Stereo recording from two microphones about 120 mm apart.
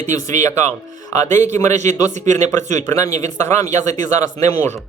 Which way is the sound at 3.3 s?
20° left (ahead or behind).